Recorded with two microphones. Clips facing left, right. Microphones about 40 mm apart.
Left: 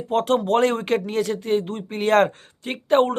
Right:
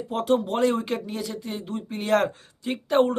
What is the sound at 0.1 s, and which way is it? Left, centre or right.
Speech, left.